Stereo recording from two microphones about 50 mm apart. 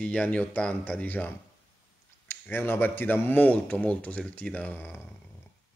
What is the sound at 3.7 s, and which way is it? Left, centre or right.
Speech, left.